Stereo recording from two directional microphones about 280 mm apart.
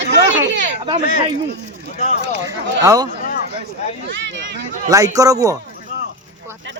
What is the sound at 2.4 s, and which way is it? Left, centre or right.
Speech, centre.